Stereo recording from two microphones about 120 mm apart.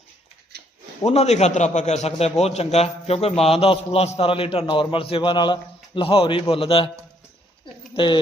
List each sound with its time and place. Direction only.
1.0 s a man's voice: 65° left (ahead or behind); by 6.9 s 50° left (ahead or behind)
7.9 s speech: 40° left (ahead or behind)